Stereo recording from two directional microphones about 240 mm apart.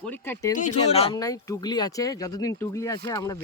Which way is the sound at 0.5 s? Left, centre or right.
Left.